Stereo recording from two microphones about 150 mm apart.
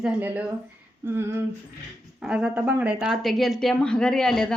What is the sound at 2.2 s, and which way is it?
Speech, 5° right (ahead or behind).